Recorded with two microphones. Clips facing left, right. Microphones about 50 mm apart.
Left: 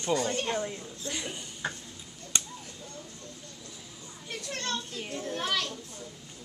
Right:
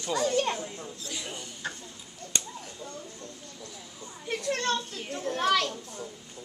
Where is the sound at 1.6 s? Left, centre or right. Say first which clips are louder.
Left 2 dB; left.